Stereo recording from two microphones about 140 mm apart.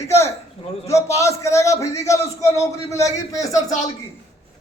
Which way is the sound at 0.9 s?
20° left (ahead or behind).